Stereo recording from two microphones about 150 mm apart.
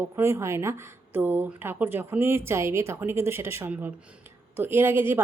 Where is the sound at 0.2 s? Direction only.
20° right (ahead or behind).